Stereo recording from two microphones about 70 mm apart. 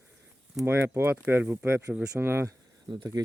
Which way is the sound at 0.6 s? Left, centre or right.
Right.